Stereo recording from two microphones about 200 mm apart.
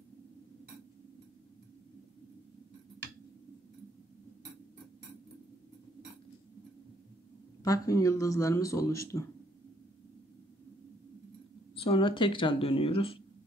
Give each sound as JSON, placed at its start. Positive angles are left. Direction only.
{"t": 7.6, "sound": "speech", "side_deg": 15}
{"t": 11.8, "sound": "speech", "side_deg": 25}